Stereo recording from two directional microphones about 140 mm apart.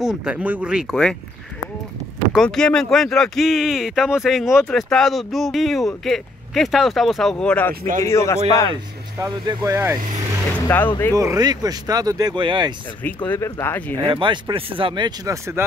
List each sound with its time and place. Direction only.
0.0 s speech: 5° right (ahead or behind)
2.3 s speech: 5° left (ahead or behind)
8.0 s a man's voice: 20° left (ahead or behind)
9.2 s speech: 25° right (ahead or behind)
10.5 s speech: 15° left (ahead or behind)
11.1 s speech: 25° right (ahead or behind)
13.0 s speech: 15° left (ahead or behind)
13.9 s speech: 35° right (ahead or behind)